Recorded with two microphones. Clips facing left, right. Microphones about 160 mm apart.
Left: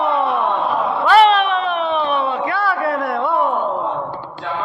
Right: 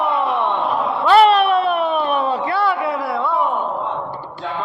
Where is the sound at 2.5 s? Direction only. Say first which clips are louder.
Right 1 dB; 30° right (ahead or behind).